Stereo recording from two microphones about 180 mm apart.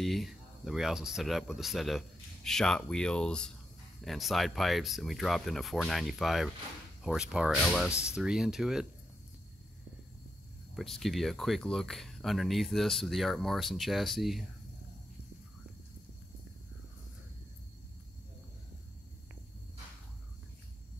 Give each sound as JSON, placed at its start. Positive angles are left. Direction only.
{"t": 0.0, "sound": "speech", "side_deg": 0}
{"t": 7.9, "sound": "speech", "side_deg": 15}
{"t": 8.2, "sound": "speech", "side_deg": -5}
{"t": 10.8, "sound": "speech", "side_deg": 0}